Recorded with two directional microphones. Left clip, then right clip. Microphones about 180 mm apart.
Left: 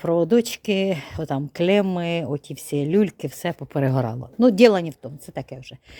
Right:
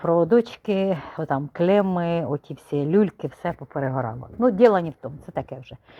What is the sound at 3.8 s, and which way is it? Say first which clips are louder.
Speech: left 3 dB; 80° left.